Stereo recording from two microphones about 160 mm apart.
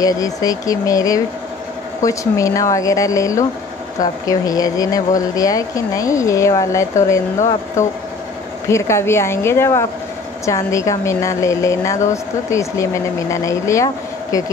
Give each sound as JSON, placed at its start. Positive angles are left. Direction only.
{"t": 0.0, "sound": "speech", "side_deg": 20}
{"t": 8.6, "sound": "a woman's voice", "side_deg": 15}